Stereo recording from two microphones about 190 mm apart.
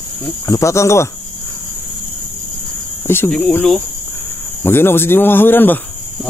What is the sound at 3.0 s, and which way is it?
Speech, 10° left (ahead or behind).